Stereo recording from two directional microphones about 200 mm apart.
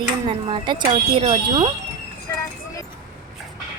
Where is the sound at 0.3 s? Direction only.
25° right (ahead or behind).